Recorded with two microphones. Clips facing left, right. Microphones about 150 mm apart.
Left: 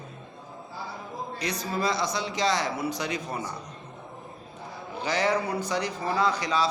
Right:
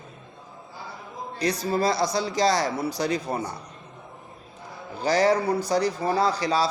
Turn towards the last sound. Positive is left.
turn(degrees=-35)  # may be behind; listen again after turning